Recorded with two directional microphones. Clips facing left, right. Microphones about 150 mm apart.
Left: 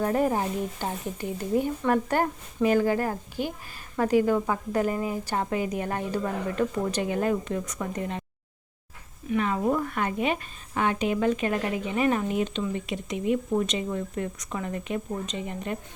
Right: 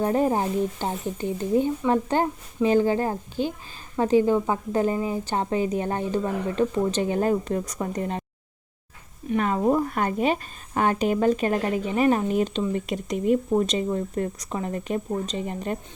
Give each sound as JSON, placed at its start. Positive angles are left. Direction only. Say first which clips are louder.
{"t": 0.0, "sound": "a woman's voice", "louder": "right 2 dB", "side_deg": -25}
{"t": 9.3, "sound": "a woman's voice", "louder": "right 3 dB", "side_deg": -35}